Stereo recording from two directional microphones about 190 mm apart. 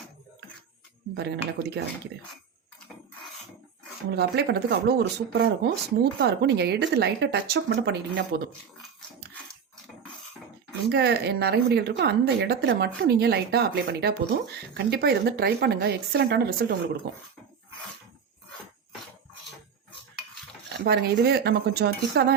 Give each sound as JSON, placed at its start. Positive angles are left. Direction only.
{"t": 1.1, "sound": "speech", "side_deg": -60}
{"t": 4.1, "sound": "speech", "side_deg": -60}
{"t": 10.8, "sound": "speech", "side_deg": -60}
{"t": 20.7, "sound": "speech", "side_deg": -60}